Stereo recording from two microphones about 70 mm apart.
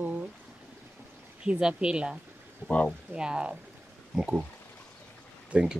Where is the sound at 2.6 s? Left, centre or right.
Centre.